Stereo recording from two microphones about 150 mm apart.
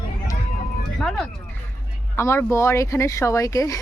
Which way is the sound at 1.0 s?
Centre (ahead or behind).